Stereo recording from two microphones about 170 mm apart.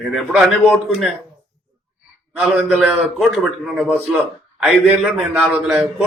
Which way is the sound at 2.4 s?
5° right (ahead or behind).